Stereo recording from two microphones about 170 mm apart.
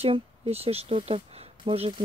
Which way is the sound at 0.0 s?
35° right (ahead or behind).